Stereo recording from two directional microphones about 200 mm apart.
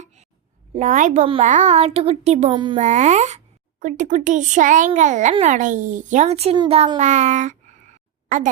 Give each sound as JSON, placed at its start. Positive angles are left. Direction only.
{"t": 0.7, "sound": "a child's voice", "side_deg": -40}
{"t": 2.8, "sound": "a child's voice", "side_deg": -35}